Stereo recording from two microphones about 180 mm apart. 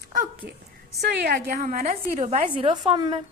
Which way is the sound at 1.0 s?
65° right (ahead or behind).